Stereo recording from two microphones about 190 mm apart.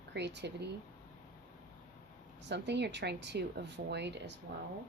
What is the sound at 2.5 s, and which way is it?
Speech, 65° right (ahead or behind).